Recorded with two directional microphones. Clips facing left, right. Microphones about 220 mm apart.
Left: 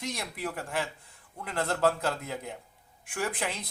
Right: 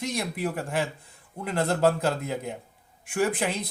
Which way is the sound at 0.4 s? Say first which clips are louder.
Right 3 dB; 20° right (ahead or behind).